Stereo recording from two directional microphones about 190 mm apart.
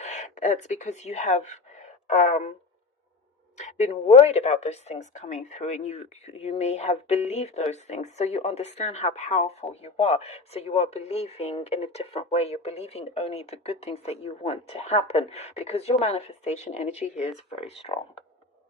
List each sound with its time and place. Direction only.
0.0 s speech: 40° left (ahead or behind)
3.6 s speech: 35° left (ahead or behind)